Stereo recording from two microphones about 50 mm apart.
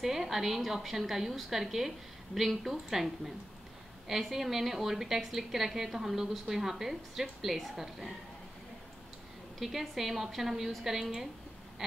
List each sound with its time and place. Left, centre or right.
0.0 s a woman's voice: centre
9.6 s a woman's voice: centre